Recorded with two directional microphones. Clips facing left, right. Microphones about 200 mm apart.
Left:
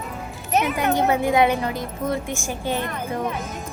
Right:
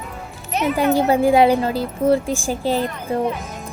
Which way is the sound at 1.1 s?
30° right (ahead or behind).